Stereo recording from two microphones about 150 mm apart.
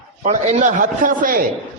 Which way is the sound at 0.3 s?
60° right (ahead or behind).